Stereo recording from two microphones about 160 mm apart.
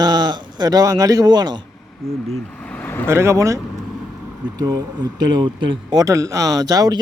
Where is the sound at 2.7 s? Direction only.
10° left (ahead or behind).